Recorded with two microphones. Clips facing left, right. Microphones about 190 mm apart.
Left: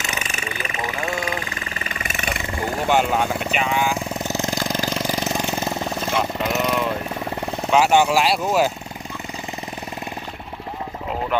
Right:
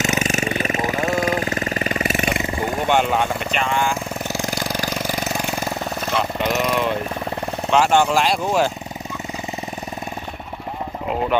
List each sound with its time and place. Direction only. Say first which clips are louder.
0.0 s jackhammer: right 9 dB; 40° right (ahead or behind)
2.8 s speech: even; 5° left (ahead or behind)
4.3 s engine: left 1 dB; 15° right (ahead or behind)
6.4 s jackhammer: right 3 dB; centre (ahead or behind)
7.7 s speech: even; 10° left (ahead or behind)